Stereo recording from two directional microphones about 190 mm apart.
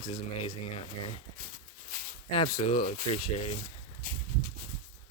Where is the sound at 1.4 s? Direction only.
50° right (ahead or behind).